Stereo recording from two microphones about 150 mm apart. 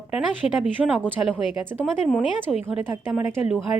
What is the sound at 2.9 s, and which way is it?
Speech, 20° right (ahead or behind).